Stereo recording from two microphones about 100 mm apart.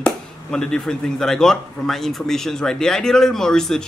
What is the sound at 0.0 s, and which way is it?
Speech, 5° left (ahead or behind).